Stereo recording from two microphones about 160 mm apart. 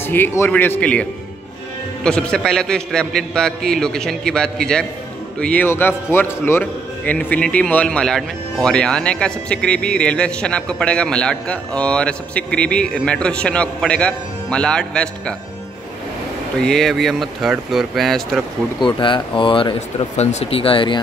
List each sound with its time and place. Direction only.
0.0 s speech: 15° left (ahead or behind)
2.0 s a man's voice: 5° left (ahead or behind)
16.5 s a man's voice: 5° left (ahead or behind)
18.9 s speech: 30° left (ahead or behind)
20.2 s speech: 45° left (ahead or behind)